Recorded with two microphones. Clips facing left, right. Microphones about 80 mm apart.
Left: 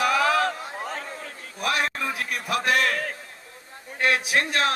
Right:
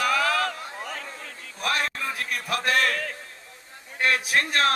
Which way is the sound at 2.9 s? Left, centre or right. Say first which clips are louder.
Left 2 dB; left.